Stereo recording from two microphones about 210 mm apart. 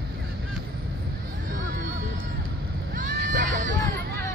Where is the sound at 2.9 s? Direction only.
40° right (ahead or behind).